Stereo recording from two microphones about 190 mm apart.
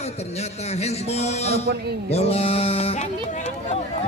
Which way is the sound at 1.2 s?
35° left (ahead or behind).